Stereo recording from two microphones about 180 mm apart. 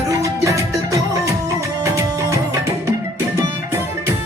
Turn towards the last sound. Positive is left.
turn(degrees=-15)  # may be behind; listen again after turning